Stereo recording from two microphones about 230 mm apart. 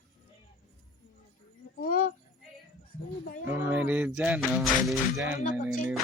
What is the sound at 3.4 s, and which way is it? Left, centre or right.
Speech, centre.